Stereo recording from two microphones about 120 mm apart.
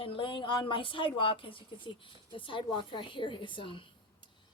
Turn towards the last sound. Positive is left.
turn(degrees=45)  # may be behind; listen again after turning